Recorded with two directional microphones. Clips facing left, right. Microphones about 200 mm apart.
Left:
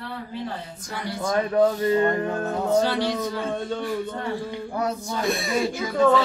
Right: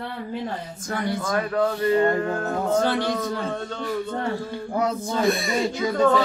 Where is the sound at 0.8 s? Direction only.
50° right (ahead or behind).